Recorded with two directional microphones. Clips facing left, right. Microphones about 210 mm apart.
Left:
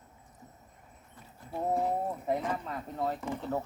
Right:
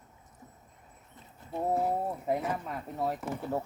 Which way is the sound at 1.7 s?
5° right (ahead or behind).